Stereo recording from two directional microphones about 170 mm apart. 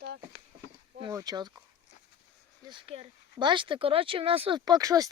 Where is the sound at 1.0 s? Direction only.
20° right (ahead or behind).